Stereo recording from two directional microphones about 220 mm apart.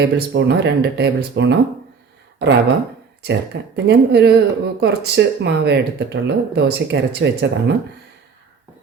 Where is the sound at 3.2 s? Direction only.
50° right (ahead or behind).